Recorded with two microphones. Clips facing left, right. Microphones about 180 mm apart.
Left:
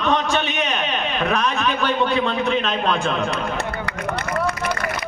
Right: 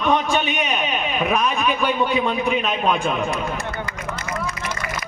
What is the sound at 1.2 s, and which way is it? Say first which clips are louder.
A man's voice: right 1 dB; 10° right (ahead or behind).